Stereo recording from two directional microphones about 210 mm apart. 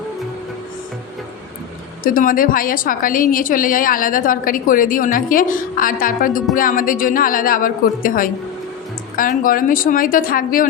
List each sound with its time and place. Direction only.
2.0 s a woman's voice: 40° left (ahead or behind)